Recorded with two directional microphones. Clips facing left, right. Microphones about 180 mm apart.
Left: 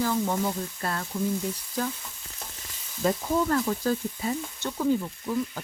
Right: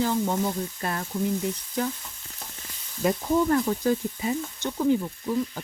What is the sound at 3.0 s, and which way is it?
Speech, 15° right (ahead or behind).